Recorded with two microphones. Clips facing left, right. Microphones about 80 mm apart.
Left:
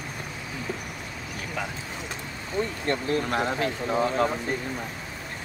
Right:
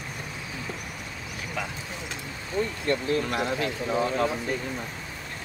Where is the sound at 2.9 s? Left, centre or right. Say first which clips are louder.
Even; left.